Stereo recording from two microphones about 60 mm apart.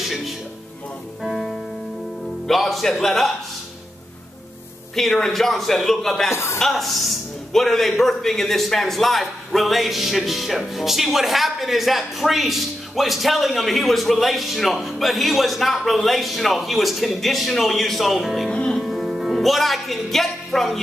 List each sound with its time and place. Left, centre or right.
1.2 s music: centre
2.4 s a man's voice: centre
4.9 s a man's voice: centre
6.3 s speech: left
6.6 s a man's voice: centre
18.5 s music: centre
18.8 s music: centre
19.0 s speech: centre